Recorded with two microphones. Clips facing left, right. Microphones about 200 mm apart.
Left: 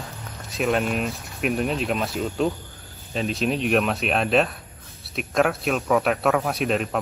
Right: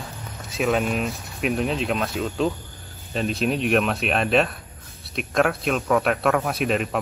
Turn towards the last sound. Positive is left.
turn(degrees=0)  # may be behind; listen again after turning